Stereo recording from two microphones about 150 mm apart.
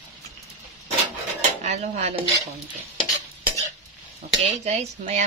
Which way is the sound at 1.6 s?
50° right (ahead or behind).